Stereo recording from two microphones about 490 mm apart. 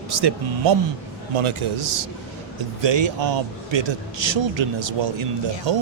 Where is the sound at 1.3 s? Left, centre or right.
Right.